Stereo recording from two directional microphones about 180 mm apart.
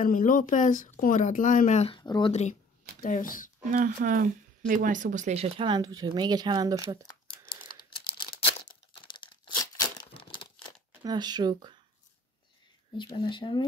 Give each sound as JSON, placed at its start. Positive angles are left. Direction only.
{"t": 0.0, "sound": "speech", "side_deg": 45}
{"t": 3.0, "sound": "speech", "side_deg": 50}
{"t": 3.7, "sound": "speech", "side_deg": -45}
{"t": 7.4, "sound": "typing", "side_deg": 55}
{"t": 7.9, "sound": "crumpling", "side_deg": 25}
{"t": 8.4, "sound": "tearing", "side_deg": 30}
{"t": 11.0, "sound": "speech", "side_deg": -20}
{"t": 12.9, "sound": "speech", "side_deg": 25}